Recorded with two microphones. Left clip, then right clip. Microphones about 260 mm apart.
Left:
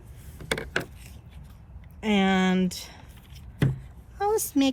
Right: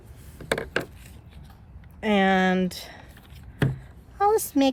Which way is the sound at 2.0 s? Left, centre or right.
Right.